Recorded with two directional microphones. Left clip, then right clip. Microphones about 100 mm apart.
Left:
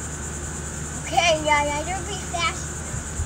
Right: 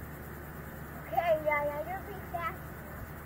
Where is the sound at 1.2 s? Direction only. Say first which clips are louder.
Left 10 dB; 25° left (ahead or behind).